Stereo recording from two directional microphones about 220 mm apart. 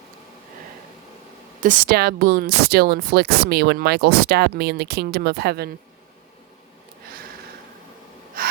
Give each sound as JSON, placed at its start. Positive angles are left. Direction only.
{"t": 1.6, "sound": "speech", "side_deg": -40}